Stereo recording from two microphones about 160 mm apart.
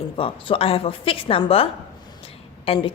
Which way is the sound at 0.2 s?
35° left (ahead or behind).